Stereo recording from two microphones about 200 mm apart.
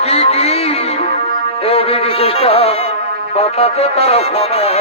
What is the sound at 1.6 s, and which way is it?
Music, 30° left (ahead or behind).